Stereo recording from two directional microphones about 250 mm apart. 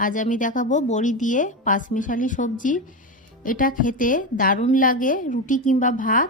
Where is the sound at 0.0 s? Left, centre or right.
Left.